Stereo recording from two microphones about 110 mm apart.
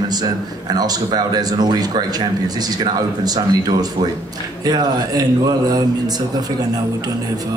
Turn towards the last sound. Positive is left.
turn(degrees=-35)  # may be behind; listen again after turning